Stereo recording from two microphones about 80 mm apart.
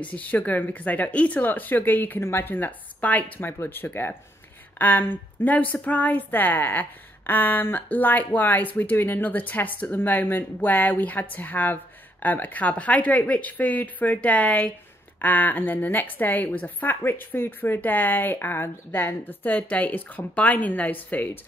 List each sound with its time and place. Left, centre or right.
0.0 s a woman's voice: centre